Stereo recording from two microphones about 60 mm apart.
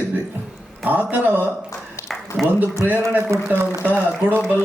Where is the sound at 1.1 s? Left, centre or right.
Right.